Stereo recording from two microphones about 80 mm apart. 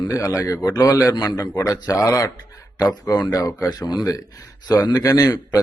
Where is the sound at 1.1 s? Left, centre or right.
Left.